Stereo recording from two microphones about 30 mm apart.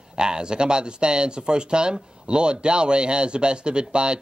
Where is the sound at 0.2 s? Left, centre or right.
Right.